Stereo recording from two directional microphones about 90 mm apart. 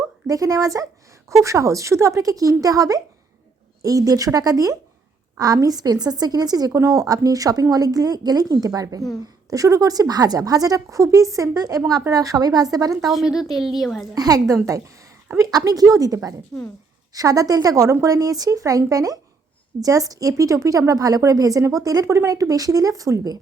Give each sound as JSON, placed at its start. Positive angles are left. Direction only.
{"t": 0.3, "sound": "a woman's voice", "side_deg": -40}
{"t": 13.1, "sound": "a woman's voice", "side_deg": -5}
{"t": 14.2, "sound": "a woman's voice", "side_deg": -40}